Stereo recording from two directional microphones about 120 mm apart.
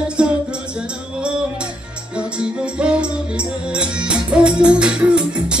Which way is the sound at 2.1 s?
10° right (ahead or behind).